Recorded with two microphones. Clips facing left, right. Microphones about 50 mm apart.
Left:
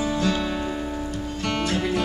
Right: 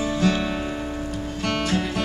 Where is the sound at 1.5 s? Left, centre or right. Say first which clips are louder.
Even; centre.